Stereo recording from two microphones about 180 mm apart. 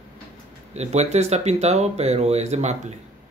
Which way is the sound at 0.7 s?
40° right (ahead or behind).